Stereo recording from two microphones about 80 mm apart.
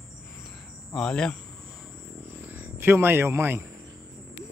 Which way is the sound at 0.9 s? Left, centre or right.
Centre.